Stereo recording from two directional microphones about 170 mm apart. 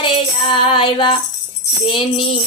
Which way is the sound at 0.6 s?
30° left (ahead or behind).